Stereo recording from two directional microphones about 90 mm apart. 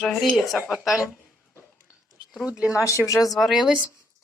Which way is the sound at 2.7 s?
35° left (ahead or behind).